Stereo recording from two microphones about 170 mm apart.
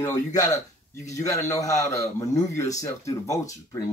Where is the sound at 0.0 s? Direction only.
20° left (ahead or behind).